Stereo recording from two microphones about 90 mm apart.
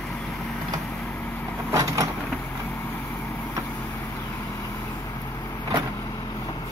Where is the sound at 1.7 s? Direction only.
40° right (ahead or behind).